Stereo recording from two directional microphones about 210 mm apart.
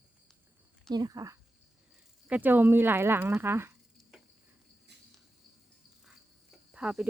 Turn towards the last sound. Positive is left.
turn(degrees=-5)  # may be behind; listen again after turning